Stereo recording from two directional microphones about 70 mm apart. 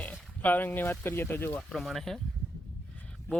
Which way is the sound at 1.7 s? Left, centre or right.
Centre.